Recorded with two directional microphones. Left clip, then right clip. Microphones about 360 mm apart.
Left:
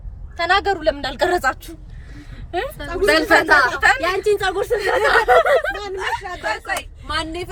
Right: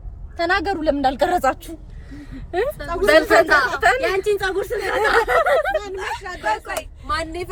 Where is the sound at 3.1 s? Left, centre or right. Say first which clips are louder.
Right 1 dB; centre.